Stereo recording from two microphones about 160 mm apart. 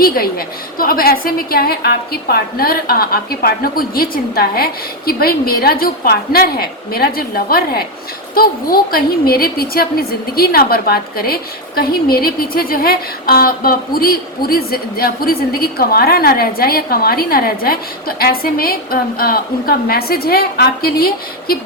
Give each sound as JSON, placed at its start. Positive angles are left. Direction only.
{"t": 0.0, "sound": "a woman's voice", "side_deg": 65}